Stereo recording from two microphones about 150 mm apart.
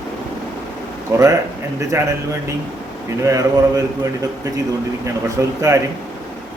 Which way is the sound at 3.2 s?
20° right (ahead or behind).